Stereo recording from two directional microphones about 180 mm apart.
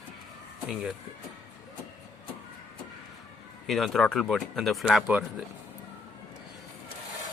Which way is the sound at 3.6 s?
Centre (ahead or behind).